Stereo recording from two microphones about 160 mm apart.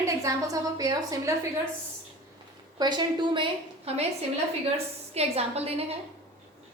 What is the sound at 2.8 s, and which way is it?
Speech, 25° right (ahead or behind).